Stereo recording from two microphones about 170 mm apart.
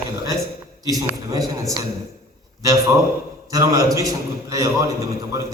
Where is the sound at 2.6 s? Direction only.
20° right (ahead or behind).